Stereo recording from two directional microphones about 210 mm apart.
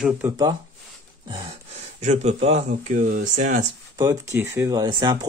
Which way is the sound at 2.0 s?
35° right (ahead or behind).